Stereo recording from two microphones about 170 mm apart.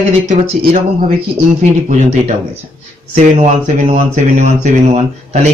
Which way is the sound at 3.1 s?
40° right (ahead or behind).